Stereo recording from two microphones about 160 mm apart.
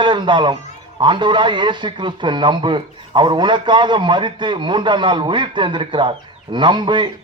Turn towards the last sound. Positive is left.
turn(degrees=-30)  # may be behind; listen again after turning